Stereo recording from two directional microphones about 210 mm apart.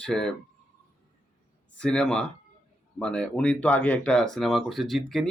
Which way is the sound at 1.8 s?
5° left (ahead or behind).